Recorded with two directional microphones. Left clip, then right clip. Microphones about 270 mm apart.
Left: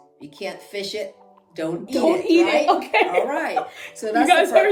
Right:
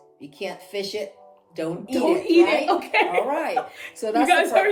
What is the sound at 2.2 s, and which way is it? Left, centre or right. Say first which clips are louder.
A child's voice: left 1 dB; centre.